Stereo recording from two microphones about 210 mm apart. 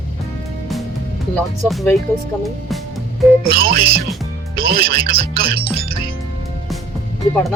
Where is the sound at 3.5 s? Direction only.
45° right (ahead or behind).